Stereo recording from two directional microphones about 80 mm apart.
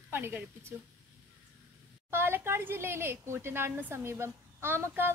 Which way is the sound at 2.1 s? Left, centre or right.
Right.